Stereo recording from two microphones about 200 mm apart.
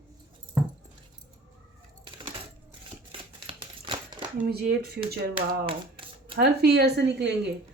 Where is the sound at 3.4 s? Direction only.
25° right (ahead or behind).